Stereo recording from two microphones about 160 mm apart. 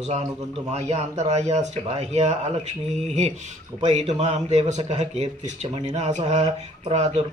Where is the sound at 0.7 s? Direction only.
45° right (ahead or behind).